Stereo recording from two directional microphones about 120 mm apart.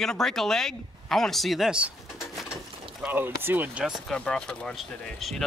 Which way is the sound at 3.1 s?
20° right (ahead or behind).